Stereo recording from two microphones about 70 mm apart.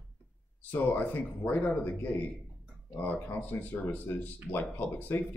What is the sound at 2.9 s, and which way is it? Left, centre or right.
Speech, left.